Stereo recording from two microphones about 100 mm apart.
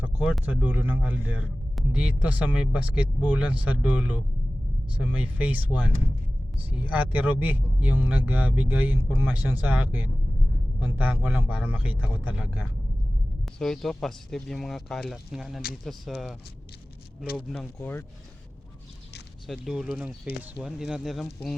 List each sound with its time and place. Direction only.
0.0 s a sound: 10° right (ahead or behind)
0.4 s speech: 15° right (ahead or behind)
13.6 s speech: 5° left (ahead or behind)
17.7 s speech: 20° left (ahead or behind)
19.5 s speech: 5° right (ahead or behind)